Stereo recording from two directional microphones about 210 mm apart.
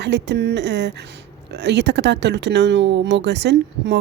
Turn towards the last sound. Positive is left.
turn(degrees=-55)  # may be behind; listen again after turning